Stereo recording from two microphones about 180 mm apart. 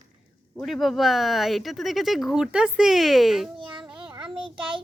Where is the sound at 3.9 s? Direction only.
30° right (ahead or behind).